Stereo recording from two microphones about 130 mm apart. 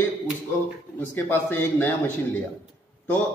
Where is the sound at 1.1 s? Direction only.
15° left (ahead or behind).